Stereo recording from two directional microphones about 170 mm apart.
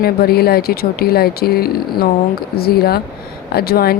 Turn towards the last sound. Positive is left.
turn(degrees=65)  # may be behind; listen again after turning